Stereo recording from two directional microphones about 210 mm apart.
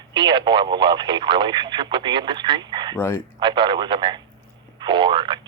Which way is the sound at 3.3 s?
20° right (ahead or behind).